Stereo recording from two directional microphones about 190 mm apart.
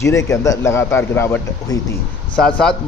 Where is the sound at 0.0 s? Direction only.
15° left (ahead or behind).